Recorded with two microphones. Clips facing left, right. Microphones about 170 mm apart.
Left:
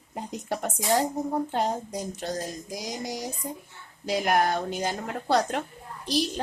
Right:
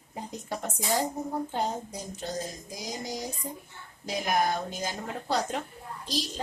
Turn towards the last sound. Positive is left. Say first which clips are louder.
# left 6 dB
turn(degrees=65)  # may be behind; listen again after turning